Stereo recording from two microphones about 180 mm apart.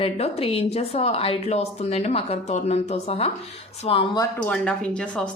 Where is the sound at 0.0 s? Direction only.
35° left (ahead or behind).